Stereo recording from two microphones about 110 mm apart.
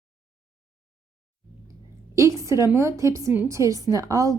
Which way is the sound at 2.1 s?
30° right (ahead or behind).